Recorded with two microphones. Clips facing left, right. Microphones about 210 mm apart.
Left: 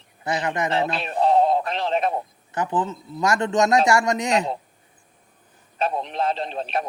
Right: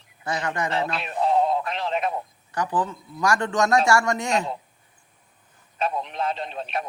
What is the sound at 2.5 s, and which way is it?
A man's voice, 25° left (ahead or behind).